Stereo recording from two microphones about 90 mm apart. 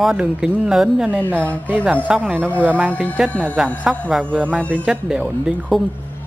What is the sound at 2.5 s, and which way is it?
Speech, 15° left (ahead or behind).